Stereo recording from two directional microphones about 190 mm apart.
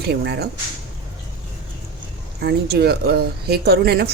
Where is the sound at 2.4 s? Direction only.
55° right (ahead or behind).